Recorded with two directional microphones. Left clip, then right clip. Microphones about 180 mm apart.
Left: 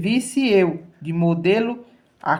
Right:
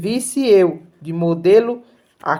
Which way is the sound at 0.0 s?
35° right (ahead or behind).